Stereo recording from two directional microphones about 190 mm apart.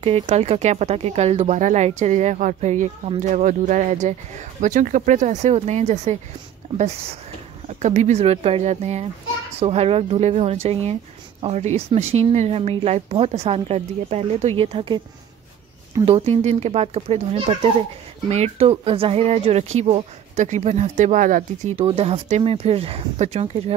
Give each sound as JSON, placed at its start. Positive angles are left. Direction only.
{"t": 0.0, "sound": "speech", "side_deg": -35}
{"t": 7.8, "sound": "speech", "side_deg": -40}
{"t": 16.1, "sound": "speech", "side_deg": -30}
{"t": 21.8, "sound": "speech", "side_deg": -30}